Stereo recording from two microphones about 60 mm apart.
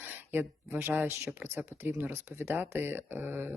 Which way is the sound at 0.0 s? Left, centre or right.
Right.